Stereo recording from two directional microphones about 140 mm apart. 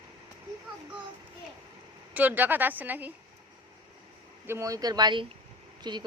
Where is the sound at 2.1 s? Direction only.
10° right (ahead or behind).